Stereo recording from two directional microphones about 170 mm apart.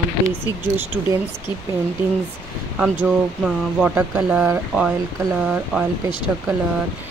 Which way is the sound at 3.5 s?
10° right (ahead or behind).